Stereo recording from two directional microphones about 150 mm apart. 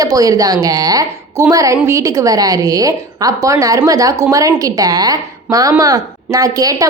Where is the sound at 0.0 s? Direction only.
25° right (ahead or behind).